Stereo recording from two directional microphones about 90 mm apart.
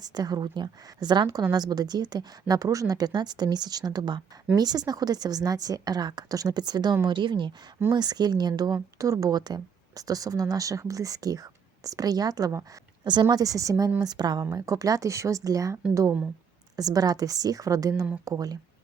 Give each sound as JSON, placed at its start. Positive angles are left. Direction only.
{"t": 0.0, "sound": "speech", "side_deg": -45}
{"t": 7.9, "sound": "speech", "side_deg": -50}